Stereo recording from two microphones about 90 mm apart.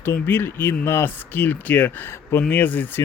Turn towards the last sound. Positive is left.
turn(degrees=20)  # may be behind; listen again after turning